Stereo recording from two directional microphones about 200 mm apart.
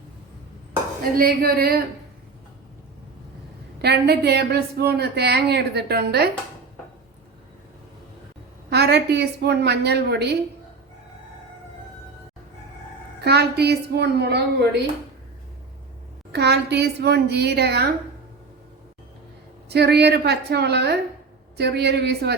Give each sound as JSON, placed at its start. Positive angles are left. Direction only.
{"t": 1.1, "sound": "a woman's voice", "side_deg": -50}
{"t": 3.8, "sound": "a woman's voice", "side_deg": -55}
{"t": 8.7, "sound": "a woman's voice", "side_deg": -55}
{"t": 13.2, "sound": "a woman's voice", "side_deg": -55}
{"t": 16.3, "sound": "a woman's voice", "side_deg": -55}
{"t": 19.6, "sound": "a woman's voice", "side_deg": -55}